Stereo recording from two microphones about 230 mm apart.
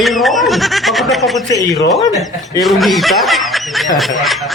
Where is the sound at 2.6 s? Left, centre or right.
Centre.